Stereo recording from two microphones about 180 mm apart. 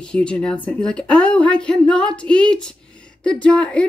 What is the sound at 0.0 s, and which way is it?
A woman's voice, 5° left (ahead or behind).